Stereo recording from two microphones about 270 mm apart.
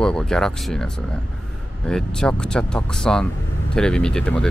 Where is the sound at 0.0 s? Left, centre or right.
Centre.